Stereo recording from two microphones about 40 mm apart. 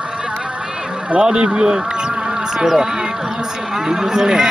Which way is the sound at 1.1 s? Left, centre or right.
Right.